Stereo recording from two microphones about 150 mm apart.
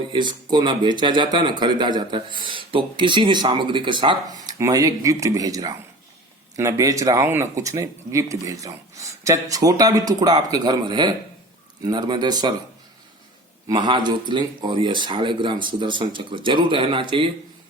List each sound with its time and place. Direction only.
0.1 s speech: 30° right (ahead or behind)
13.7 s speech: 30° right (ahead or behind)